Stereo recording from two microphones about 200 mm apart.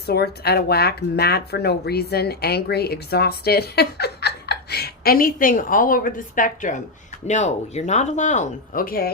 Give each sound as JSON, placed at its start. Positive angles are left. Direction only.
{"t": 0.1, "sound": "speech", "side_deg": 55}